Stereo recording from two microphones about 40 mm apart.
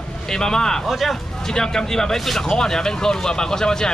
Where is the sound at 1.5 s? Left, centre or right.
Centre.